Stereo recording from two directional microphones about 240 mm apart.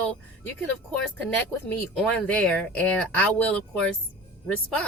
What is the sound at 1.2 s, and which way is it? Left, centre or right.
A woman's voice, centre.